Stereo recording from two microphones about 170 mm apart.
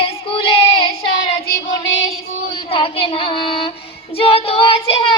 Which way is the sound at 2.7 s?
30° left (ahead or behind).